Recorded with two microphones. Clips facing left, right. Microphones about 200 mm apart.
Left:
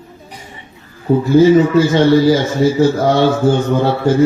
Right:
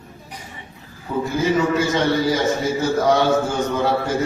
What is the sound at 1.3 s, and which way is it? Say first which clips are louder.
A man's voice: left 11 dB; 30° left (ahead or behind).